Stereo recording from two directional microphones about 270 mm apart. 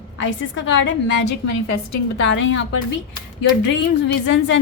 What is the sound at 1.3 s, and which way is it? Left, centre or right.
Speech, left.